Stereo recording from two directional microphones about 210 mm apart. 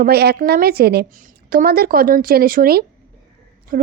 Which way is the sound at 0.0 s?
50° right (ahead or behind).